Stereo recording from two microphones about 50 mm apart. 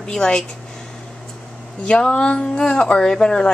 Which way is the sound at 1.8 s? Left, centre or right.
Centre.